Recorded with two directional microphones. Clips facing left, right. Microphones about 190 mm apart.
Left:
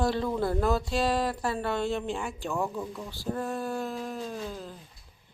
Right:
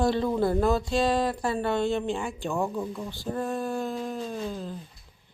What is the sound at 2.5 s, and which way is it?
Speech, 10° right (ahead or behind).